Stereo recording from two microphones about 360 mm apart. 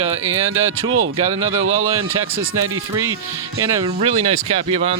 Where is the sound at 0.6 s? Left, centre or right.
Right.